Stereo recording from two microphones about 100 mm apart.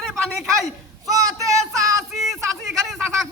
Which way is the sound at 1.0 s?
35° right (ahead or behind).